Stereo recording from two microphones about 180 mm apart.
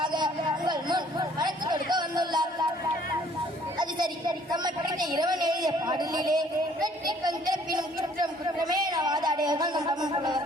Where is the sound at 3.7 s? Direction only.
25° right (ahead or behind).